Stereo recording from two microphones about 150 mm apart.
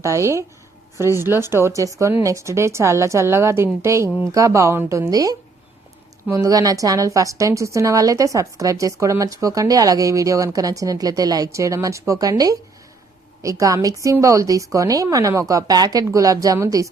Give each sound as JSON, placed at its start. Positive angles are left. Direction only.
{"t": 0.0, "sound": "a woman's voice", "side_deg": -20}